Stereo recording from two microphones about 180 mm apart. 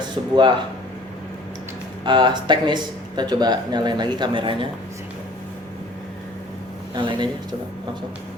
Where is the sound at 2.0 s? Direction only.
25° right (ahead or behind).